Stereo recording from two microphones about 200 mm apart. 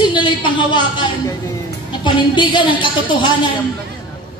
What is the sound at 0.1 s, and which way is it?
Speech, 25° left (ahead or behind).